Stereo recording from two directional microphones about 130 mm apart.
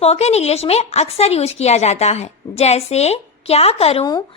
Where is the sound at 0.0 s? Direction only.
55° left (ahead or behind).